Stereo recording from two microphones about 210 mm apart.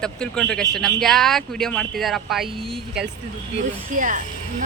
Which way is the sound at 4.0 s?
35° right (ahead or behind).